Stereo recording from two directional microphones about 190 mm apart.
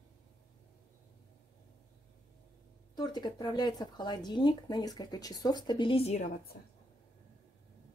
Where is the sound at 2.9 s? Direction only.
20° left (ahead or behind).